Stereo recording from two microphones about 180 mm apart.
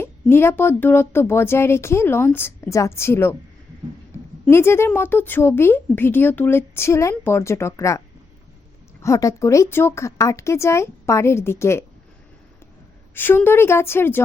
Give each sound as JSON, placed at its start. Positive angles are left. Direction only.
{"t": 0.0, "sound": "a woman's voice", "side_deg": 15}
{"t": 4.4, "sound": "a woman's voice", "side_deg": 15}
{"t": 13.1, "sound": "a woman's voice", "side_deg": 10}